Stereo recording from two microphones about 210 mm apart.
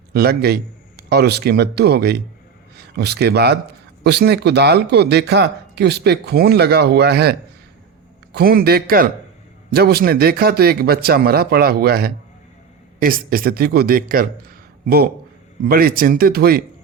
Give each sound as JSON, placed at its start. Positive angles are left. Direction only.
{"t": 0.1, "sound": "a man's voice", "side_deg": -45}